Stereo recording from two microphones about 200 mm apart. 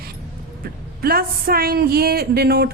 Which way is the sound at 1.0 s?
50° right (ahead or behind).